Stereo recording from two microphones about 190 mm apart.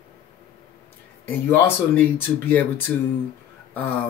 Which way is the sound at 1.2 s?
10° left (ahead or behind).